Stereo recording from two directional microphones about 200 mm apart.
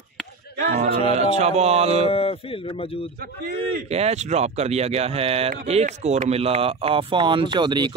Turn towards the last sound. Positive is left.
turn(degrees=-20)  # may be behind; listen again after turning